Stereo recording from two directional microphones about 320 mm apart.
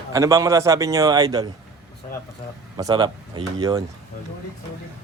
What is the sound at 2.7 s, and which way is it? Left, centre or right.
Speech, centre.